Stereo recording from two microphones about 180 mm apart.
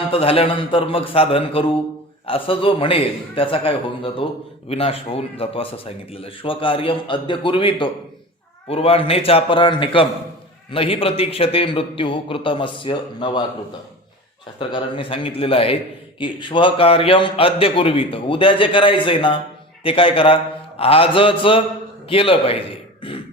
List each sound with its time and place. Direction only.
0.1 s a man's voice: 30° left (ahead or behind)
14.6 s a man's voice: 25° left (ahead or behind)